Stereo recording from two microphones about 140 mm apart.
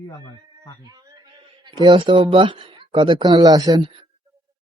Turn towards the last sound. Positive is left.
turn(degrees=-30)  # may be behind; listen again after turning